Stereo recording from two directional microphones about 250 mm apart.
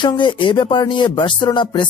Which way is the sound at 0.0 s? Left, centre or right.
Centre.